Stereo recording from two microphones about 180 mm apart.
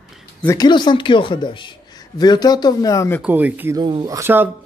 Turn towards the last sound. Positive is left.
turn(degrees=-10)  # may be behind; listen again after turning